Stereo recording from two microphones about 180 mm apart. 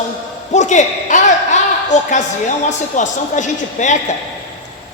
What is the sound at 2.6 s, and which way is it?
Speech, 45° left (ahead or behind).